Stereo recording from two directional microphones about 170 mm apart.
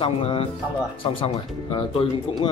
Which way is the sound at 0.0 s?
30° left (ahead or behind).